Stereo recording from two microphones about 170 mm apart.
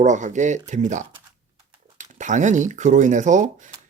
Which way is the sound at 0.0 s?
45° right (ahead or behind).